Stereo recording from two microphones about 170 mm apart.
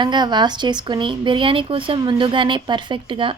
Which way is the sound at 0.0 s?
25° right (ahead or behind).